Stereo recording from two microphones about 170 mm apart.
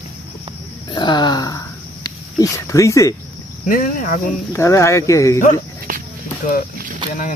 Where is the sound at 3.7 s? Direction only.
55° left (ahead or behind).